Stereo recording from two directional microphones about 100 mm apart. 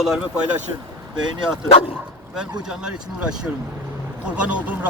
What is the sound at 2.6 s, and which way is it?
Speech, 10° right (ahead or behind).